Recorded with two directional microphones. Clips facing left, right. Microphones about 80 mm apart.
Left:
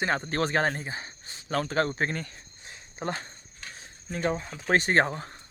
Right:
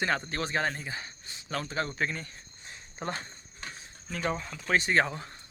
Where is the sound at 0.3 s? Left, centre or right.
Left.